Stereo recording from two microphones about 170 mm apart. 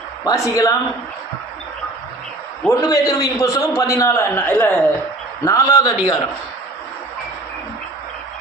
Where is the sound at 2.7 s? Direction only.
20° left (ahead or behind).